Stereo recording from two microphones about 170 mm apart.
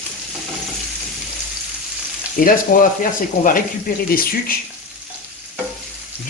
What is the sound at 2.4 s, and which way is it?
Speech, 55° left (ahead or behind).